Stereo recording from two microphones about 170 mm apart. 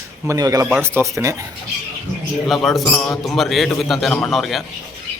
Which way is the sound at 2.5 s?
Centre (ahead or behind).